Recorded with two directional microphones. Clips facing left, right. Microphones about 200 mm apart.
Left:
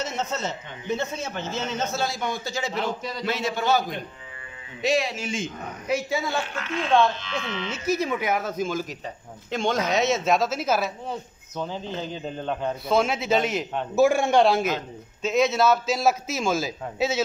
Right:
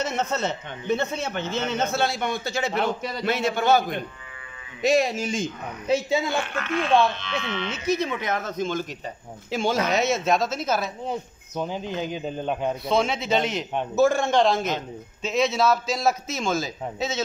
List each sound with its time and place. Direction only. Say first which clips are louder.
0.0 s speech: right 3 dB; 60° right (ahead or behind); by 5.5 s 40° right (ahead or behind)
5.9 s speech: right 3 dB; 25° right (ahead or behind)
6.4 s speech: right 3 dB; 55° right (ahead or behind)
7.7 s speech: left 1 dB; 5° left (ahead or behind)
9.5 s a man's voice: right 1 dB; 5° right (ahead or behind)
11.1 s speech: right 3 dB; 15° right (ahead or behind)
12.8 s a man's voice: left 2 dB; 5° left (ahead or behind)